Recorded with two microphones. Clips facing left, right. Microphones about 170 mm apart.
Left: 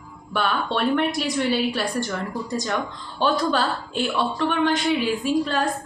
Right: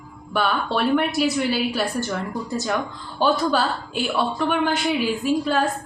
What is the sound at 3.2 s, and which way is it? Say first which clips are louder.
A woman's voice: right 1 dB; 5° right (ahead or behind).